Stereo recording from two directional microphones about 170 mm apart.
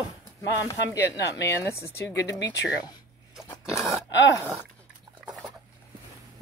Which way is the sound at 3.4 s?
15° left (ahead or behind).